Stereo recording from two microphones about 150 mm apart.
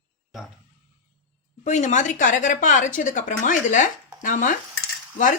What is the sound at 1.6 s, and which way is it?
Speech, 50° left (ahead or behind).